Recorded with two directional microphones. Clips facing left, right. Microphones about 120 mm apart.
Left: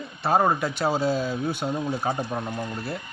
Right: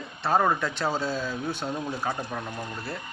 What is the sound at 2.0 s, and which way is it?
Speech, 25° left (ahead or behind).